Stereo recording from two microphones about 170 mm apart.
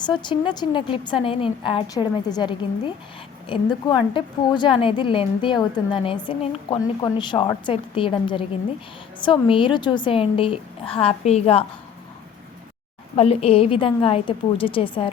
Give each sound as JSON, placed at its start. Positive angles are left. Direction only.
{"t": 0.0, "sound": "a woman's voice", "side_deg": 25}
{"t": 13.1, "sound": "a woman's voice", "side_deg": 35}